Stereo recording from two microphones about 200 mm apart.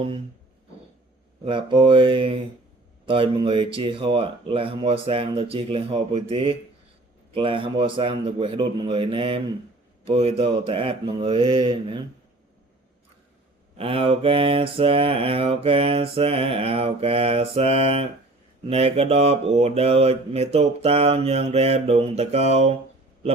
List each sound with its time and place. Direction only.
1.5 s mantra: 25° right (ahead or behind)
13.7 s mantra: 30° right (ahead or behind)
18.7 s speech: 30° right (ahead or behind)